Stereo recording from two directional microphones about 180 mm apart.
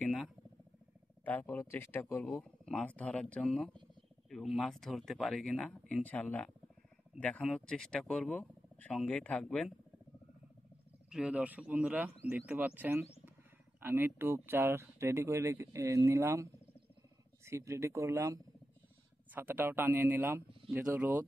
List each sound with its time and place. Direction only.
0.0 s a sound: 5° left (ahead or behind)
1.2 s speech: 10° left (ahead or behind)
11.1 s speech: 5° right (ahead or behind)
17.5 s speech: 15° right (ahead or behind)